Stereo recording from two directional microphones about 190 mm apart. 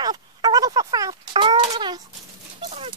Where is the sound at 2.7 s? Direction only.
30° right (ahead or behind).